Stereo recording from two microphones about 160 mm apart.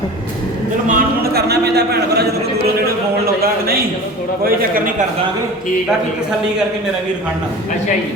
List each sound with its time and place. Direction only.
0.9 s a man's voice: 75° right (ahead or behind); by 2.2 s 90° right
3.4 s a man's voice: 70° right (ahead or behind)